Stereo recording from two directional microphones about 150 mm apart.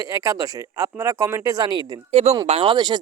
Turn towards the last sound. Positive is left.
turn(degrees=-30)  # may be behind; listen again after turning